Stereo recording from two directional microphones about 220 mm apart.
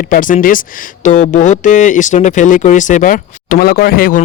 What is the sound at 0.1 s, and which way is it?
Speech, 35° left (ahead or behind).